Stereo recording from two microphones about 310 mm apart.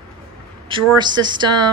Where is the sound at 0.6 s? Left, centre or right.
Centre.